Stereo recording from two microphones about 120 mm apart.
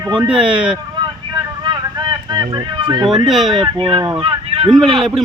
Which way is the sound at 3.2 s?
Centre (ahead or behind).